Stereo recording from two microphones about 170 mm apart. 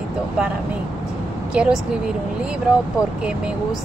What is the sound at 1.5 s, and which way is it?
Speech, 5° right (ahead or behind).